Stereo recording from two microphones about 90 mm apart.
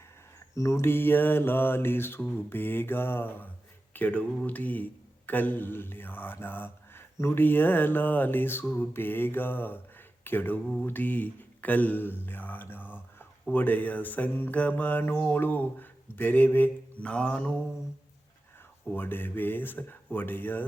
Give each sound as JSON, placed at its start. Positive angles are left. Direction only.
{"t": 0.5, "sound": "speech", "side_deg": 35}
{"t": 18.9, "sound": "speech", "side_deg": 25}